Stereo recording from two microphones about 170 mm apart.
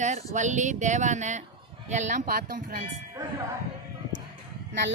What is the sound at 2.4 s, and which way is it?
Speech, 65° right (ahead or behind).